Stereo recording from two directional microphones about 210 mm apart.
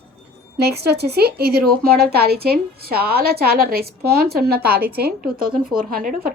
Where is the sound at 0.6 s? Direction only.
50° right (ahead or behind).